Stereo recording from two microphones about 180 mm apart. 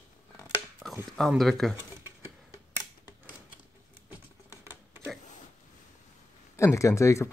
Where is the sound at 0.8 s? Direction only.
Centre (ahead or behind).